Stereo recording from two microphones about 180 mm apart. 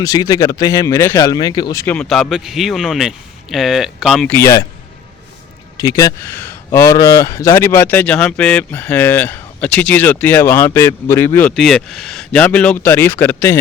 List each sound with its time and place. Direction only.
0.0 s speech: 20° left (ahead or behind)
2.0 s a man's voice: 5° left (ahead or behind)
5.8 s speech: 20° left (ahead or behind)